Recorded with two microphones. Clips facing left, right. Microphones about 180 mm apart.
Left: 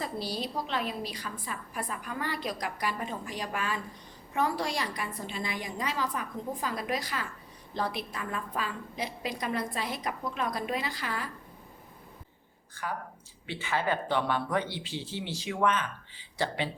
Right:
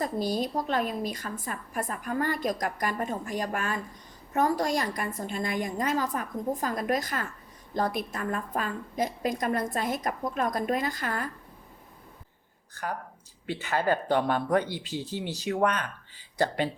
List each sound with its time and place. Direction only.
0.0 s a woman's voice: 45° right (ahead or behind)
13.5 s a woman's voice: 45° right (ahead or behind)